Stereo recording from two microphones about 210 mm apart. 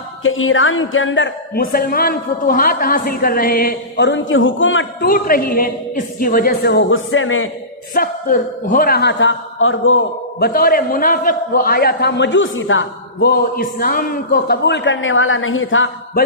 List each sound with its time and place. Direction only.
0.2 s a woman's voice: 70° left (ahead or behind)
5.0 s a man's voice: 40° left (ahead or behind); by 7.4 s 70° left (ahead or behind)
7.9 s a man's voice: 40° left (ahead or behind); by 9.9 s 65° left (ahead or behind)
10.4 s a man's voice: 45° left (ahead or behind); by 13.3 s 65° left (ahead or behind)
13.3 s a woman's voice: 45° left (ahead or behind); by 15.9 s 65° left (ahead or behind)